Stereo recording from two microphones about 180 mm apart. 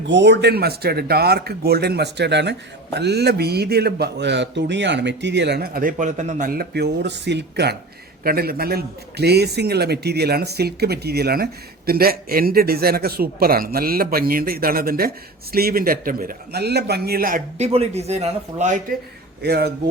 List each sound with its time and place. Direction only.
0.0 s speech: 75° right (ahead or behind)
8.2 s speech: 55° right (ahead or behind)
17.6 s a man's voice: 35° right (ahead or behind)
19.4 s speech: 65° right (ahead or behind)